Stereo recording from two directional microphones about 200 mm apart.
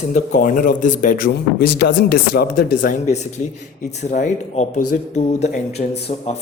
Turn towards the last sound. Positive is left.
turn(degrees=35)  # may be behind; listen again after turning